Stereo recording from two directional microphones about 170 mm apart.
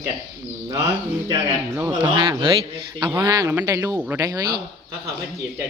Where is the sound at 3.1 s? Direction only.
10° right (ahead or behind).